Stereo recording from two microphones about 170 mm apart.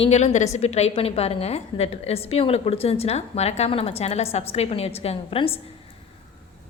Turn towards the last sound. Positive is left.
turn(degrees=35)  # may be behind; listen again after turning